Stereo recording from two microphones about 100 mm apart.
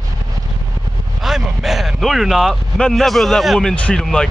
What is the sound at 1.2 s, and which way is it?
Speech, 5° right (ahead or behind).